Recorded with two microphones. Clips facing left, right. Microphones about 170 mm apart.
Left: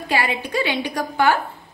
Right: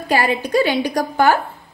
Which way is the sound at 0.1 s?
40° right (ahead or behind).